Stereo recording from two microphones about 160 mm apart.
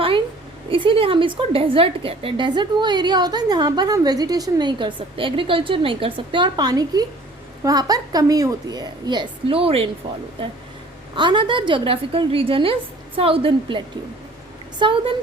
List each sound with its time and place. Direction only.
0.7 s a woman's voice: 35° right (ahead or behind)